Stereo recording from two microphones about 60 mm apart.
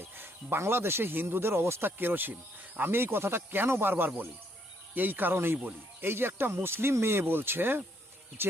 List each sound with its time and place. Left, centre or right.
0.0 s speech: right
2.0 s speech: right